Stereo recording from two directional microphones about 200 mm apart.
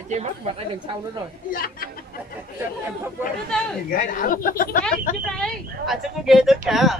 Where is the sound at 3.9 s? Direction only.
40° left (ahead or behind).